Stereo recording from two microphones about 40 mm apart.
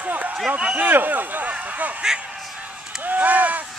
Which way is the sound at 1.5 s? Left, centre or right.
Right.